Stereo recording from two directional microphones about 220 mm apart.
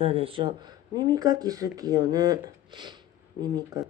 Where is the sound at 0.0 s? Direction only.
25° right (ahead or behind).